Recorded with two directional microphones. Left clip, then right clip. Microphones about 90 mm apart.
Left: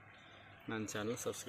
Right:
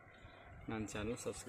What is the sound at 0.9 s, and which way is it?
Speech, 5° left (ahead or behind).